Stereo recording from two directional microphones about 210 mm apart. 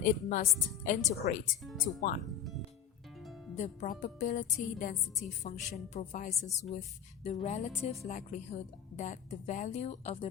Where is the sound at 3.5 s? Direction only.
35° left (ahead or behind).